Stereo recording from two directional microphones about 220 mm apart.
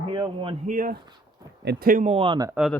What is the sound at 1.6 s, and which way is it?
Speech, 45° right (ahead or behind).